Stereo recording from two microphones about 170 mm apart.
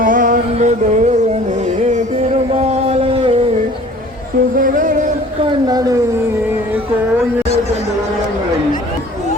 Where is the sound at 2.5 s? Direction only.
40° right (ahead or behind).